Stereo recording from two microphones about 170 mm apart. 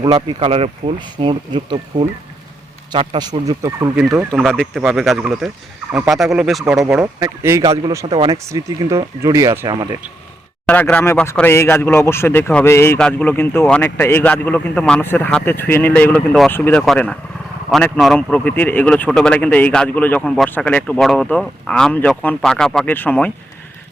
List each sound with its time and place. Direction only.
0.0 s speech: 35° right (ahead or behind); by 4.4 s 15° right (ahead or behind)
4.4 s speech: centre (ahead or behind)
7.0 s speech: 20° right (ahead or behind)
8.0 s speech: 35° right (ahead or behind)
8.3 s speech: 20° right (ahead or behind)
10.7 s speech: 10° left (ahead or behind)